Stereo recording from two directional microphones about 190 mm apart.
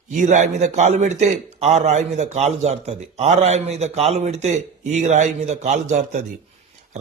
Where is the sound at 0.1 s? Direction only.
40° right (ahead or behind).